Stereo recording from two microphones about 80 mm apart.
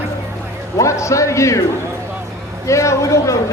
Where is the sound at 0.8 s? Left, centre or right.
Left.